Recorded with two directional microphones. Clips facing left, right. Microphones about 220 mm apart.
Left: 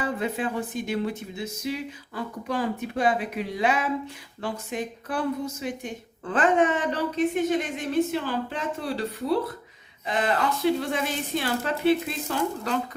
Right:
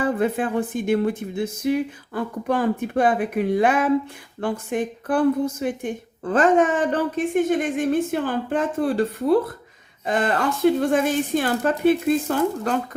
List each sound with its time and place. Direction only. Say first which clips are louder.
0.0 s a woman's voice: right 6 dB; 50° right (ahead or behind)